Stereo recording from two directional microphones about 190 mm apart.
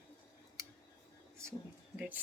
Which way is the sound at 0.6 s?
15° right (ahead or behind).